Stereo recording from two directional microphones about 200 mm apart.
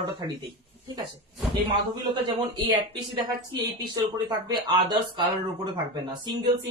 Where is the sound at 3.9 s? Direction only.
20° right (ahead or behind).